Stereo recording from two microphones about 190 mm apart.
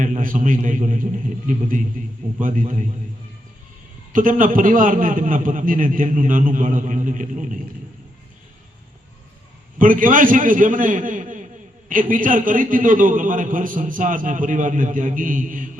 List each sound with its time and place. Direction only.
0.0 s a man's voice: 45° right (ahead or behind)
4.1 s a man's voice: 45° right (ahead or behind)
9.7 s a man's voice: 45° right (ahead or behind)